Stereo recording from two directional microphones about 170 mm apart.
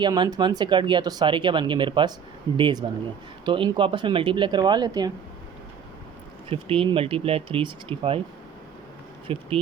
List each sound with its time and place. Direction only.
0.0 s speech: 25° right (ahead or behind)
6.5 s speech: 35° right (ahead or behind)
9.2 s speech: 30° right (ahead or behind)